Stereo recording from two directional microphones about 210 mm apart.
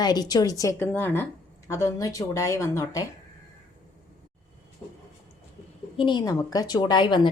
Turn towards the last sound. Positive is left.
turn(degrees=20)  # may be behind; listen again after turning